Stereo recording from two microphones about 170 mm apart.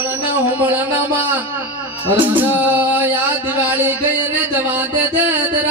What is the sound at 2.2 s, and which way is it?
Singing, 10° right (ahead or behind).